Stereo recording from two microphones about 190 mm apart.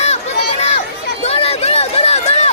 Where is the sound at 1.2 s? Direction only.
30° left (ahead or behind).